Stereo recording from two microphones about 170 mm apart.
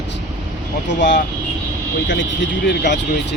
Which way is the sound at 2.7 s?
85° left.